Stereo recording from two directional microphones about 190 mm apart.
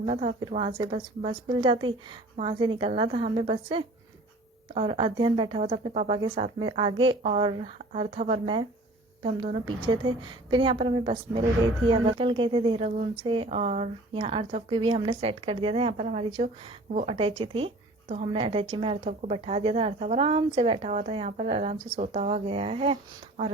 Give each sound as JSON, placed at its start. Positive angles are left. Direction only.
{"t": 0.0, "sound": "a woman's voice", "side_deg": -35}
{"t": 9.6, "sound": "a woman's voice", "side_deg": -25}